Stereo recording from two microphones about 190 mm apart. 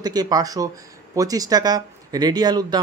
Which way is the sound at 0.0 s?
20° right (ahead or behind).